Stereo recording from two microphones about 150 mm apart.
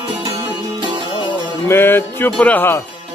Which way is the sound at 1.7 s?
15° left (ahead or behind).